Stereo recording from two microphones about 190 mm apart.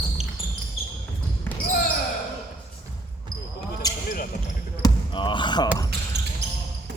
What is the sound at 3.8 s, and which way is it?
Basketball bounce, 20° left (ahead or behind).